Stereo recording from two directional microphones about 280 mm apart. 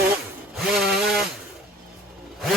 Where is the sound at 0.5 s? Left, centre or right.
Centre.